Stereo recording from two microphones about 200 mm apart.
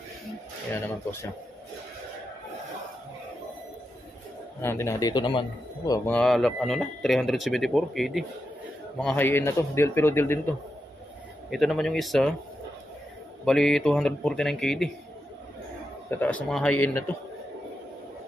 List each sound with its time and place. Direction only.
4.6 s a man's voice: 15° left (ahead or behind)
6.0 s a man's voice: 5° left (ahead or behind)
11.5 s speech: centre (ahead or behind)
13.5 s speech: centre (ahead or behind)
16.1 s a man's voice: 10° left (ahead or behind)